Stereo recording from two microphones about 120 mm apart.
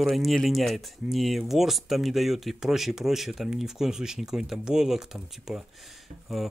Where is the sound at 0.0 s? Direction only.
Centre (ahead or behind).